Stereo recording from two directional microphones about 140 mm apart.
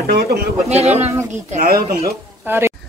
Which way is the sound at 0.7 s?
50° right (ahead or behind).